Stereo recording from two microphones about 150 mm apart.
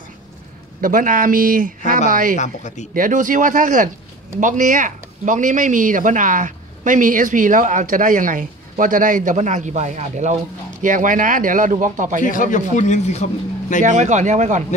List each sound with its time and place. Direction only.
0.7 s speech: 65° right (ahead or behind)
2.3 s speech: 55° left (ahead or behind)
2.9 s speech: 60° right (ahead or behind)
10.8 s speech: 60° right (ahead or behind)
12.2 s a man's voice: 60° left (ahead or behind)
13.8 s speech: 55° right (ahead or behind)